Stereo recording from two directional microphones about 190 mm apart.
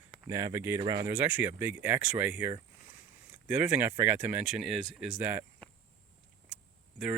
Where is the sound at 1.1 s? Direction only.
10° right (ahead or behind).